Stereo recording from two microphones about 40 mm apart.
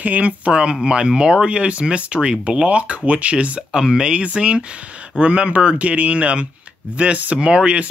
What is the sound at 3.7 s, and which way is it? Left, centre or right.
Speech, centre.